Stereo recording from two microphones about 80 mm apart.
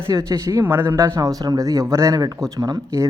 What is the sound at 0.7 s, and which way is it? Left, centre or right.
Speech, right.